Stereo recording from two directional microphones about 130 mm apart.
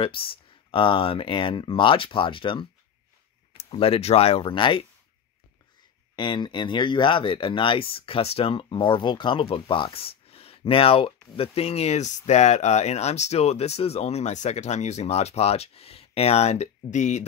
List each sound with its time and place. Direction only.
0.0 s speech: 45° left (ahead or behind)
6.1 s speech: 35° left (ahead or behind); by 17.2 s 65° left (ahead or behind)